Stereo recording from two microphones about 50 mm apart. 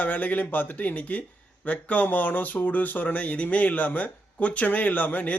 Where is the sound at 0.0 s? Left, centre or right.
Left.